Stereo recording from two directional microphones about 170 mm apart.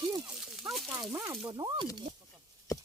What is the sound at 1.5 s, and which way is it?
Speech, 25° right (ahead or behind).